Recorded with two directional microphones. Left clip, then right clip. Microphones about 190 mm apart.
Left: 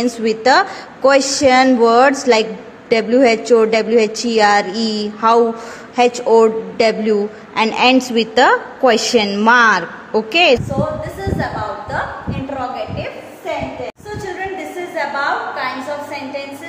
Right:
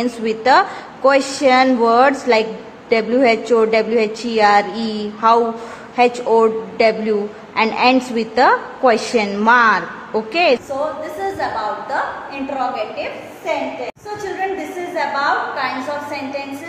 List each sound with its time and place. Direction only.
0.0 s a woman's voice: 20° left (ahead or behind)
12.5 s a woman's voice: 10° left (ahead or behind)
15.0 s a woman's voice: centre (ahead or behind)